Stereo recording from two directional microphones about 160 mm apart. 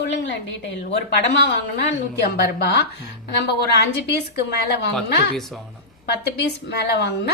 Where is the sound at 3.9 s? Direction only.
90° left.